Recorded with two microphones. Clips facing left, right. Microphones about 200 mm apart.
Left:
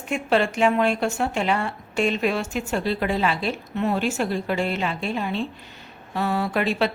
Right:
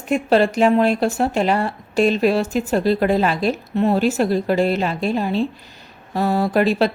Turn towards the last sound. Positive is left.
turn(degrees=-40)  # may be behind; listen again after turning